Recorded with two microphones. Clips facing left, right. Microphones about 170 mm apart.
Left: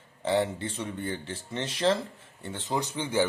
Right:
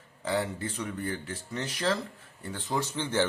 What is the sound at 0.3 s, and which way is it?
Speech, 25° left (ahead or behind).